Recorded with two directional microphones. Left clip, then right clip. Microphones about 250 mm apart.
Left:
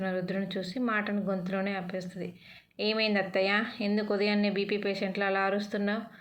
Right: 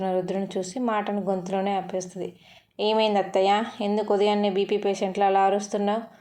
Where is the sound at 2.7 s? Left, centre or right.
Right.